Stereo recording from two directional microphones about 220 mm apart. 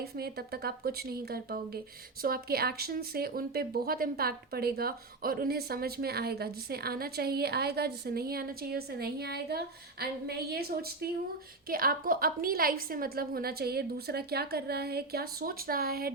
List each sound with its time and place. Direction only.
0.0 s speech: 45° right (ahead or behind)